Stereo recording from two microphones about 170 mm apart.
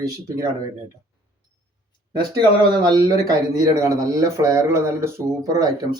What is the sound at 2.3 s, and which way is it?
Speech, 25° right (ahead or behind).